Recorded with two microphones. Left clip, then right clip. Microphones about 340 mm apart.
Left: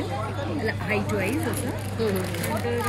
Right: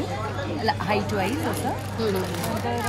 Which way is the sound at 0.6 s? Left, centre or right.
Centre.